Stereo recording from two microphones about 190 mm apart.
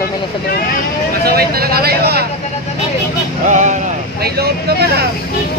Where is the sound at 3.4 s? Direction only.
40° right (ahead or behind).